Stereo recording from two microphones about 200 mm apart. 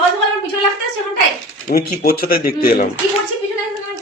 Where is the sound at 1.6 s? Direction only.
45° left (ahead or behind).